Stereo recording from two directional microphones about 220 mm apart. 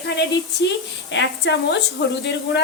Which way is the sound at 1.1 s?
50° left (ahead or behind).